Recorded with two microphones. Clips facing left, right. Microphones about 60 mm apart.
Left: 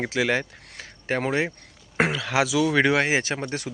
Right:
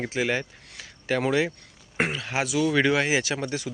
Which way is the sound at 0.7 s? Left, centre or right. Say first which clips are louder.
Even; left.